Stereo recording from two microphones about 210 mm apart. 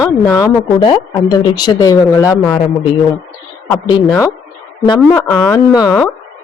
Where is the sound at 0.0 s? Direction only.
15° left (ahead or behind).